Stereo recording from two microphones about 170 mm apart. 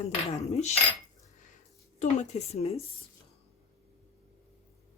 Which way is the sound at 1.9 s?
40° left (ahead or behind).